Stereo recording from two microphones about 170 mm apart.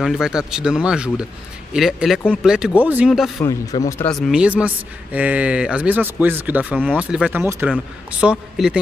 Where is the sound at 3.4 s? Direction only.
20° left (ahead or behind).